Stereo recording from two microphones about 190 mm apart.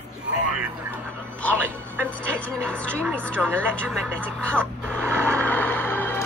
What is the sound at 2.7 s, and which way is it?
Music, 5° left (ahead or behind).